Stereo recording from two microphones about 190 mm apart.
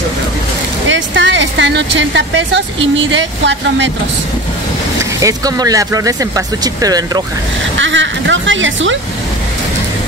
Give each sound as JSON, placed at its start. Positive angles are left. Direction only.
{"t": 0.8, "sound": "a sound", "side_deg": -80}
{"t": 3.2, "sound": "speech", "side_deg": -70}
{"t": 5.2, "sound": "speech", "side_deg": -20}
{"t": 7.8, "sound": "speech", "side_deg": -75}